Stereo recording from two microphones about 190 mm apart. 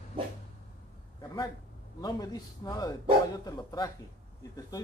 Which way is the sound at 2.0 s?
20° left (ahead or behind).